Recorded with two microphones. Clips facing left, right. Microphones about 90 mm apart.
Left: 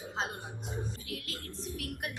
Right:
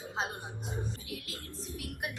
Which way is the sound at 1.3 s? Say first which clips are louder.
Left 2 dB; 20° right (ahead or behind).